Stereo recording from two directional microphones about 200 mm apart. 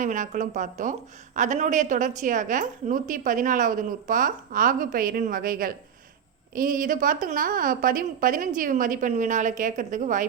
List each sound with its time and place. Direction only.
0.0 s a woman's voice: 40° right (ahead or behind)